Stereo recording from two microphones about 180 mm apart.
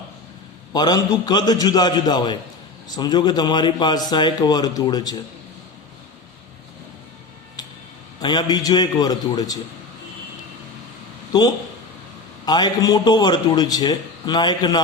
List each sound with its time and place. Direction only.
0.7 s a man's voice: 20° left (ahead or behind)
8.2 s a man's voice: 25° left (ahead or behind)
11.3 s a man's voice: 20° left (ahead or behind)